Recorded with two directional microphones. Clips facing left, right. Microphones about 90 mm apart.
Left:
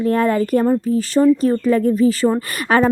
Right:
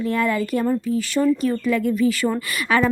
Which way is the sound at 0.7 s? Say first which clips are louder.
Left 5 dB; 30° left (ahead or behind).